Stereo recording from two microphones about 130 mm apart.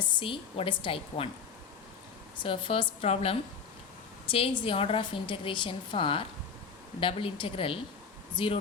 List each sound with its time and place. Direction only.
0.2 s a woman's voice: 45° left (ahead or behind)
2.4 s a woman's voice: 40° left (ahead or behind)